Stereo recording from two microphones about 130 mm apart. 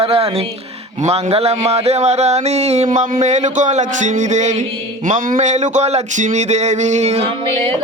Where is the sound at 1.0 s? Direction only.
50° right (ahead or behind).